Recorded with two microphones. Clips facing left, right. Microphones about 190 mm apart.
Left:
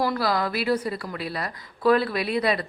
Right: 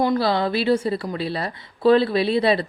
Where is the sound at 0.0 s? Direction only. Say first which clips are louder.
Right 4 dB; 25° right (ahead or behind).